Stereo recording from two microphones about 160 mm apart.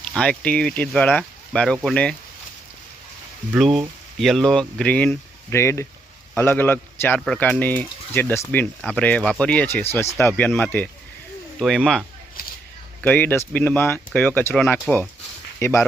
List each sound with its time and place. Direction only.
0.0 s speech: 5° left (ahead or behind)
3.5 s speech: 5° right (ahead or behind); by 15.8 s 15° left (ahead or behind)